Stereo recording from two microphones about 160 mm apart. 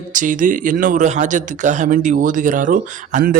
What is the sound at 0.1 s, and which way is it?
Speech, 55° right (ahead or behind).